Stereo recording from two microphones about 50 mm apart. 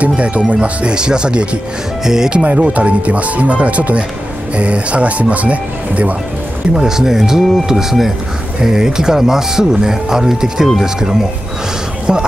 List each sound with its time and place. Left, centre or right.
0.0 s speech: right
2.4 s speech: right
6.7 s speech: centre